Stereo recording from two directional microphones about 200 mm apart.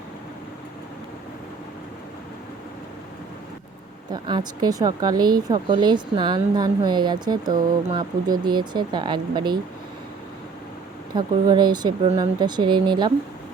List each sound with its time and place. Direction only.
4.1 s speech: 20° right (ahead or behind)
11.1 s speech: 20° right (ahead or behind)